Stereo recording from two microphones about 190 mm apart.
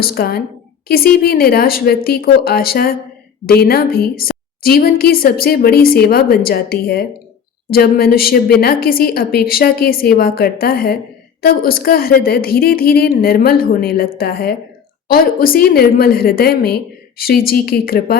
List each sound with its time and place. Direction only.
0.0 s a woman's voice: 55° left (ahead or behind)